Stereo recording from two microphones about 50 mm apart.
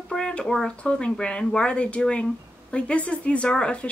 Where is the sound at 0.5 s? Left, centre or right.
Centre.